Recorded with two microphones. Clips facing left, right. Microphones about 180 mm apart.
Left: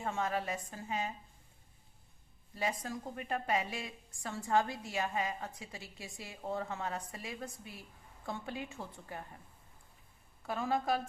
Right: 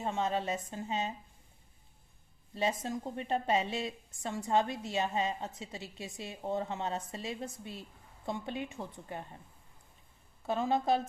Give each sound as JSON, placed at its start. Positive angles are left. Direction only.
{"t": 0.0, "sound": "a woman's voice", "side_deg": -20}
{"t": 2.6, "sound": "a woman's voice", "side_deg": -25}
{"t": 10.4, "sound": "a woman's voice", "side_deg": -25}